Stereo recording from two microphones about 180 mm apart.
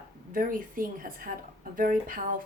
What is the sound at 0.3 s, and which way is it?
A woman's voice, 50° right (ahead or behind).